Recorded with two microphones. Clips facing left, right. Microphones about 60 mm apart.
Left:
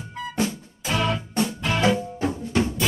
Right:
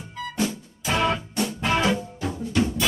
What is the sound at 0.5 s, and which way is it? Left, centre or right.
Music, right.